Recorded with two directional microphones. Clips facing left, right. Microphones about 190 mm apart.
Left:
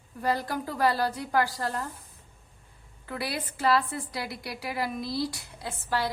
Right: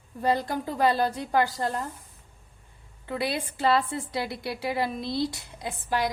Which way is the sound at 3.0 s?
25° right (ahead or behind).